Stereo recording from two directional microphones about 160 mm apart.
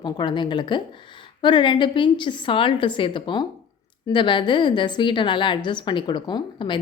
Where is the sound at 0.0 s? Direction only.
30° left (ahead or behind).